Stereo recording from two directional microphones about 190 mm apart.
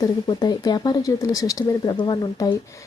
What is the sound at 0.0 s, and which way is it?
Speech, 20° left (ahead or behind).